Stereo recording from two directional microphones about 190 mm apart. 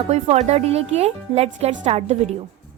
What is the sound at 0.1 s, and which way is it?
Speech, 35° right (ahead or behind).